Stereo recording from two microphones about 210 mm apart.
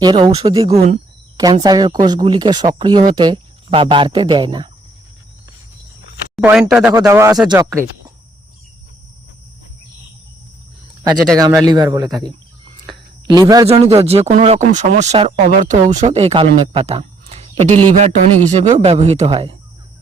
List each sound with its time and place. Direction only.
0.0 s speech: 20° right (ahead or behind)
6.3 s speech: 5° right (ahead or behind)
11.3 s speech: 15° right (ahead or behind)
16.7 s a sound: 30° right (ahead or behind)
18.0 s speech: 35° right (ahead or behind)